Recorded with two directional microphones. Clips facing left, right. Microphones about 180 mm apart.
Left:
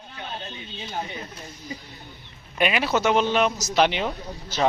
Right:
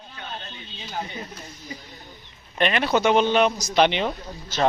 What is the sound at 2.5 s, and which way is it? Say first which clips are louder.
Speech: right 1 dB; 5° left (ahead or behind).